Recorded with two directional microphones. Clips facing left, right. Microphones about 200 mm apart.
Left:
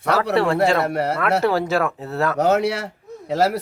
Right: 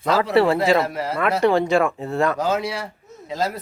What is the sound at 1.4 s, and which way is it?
Speech, 5° left (ahead or behind).